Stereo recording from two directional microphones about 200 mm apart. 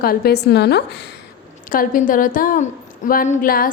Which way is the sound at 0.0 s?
50° left (ahead or behind).